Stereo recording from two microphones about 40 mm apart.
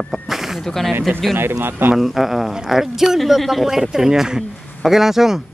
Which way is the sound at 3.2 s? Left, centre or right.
Centre.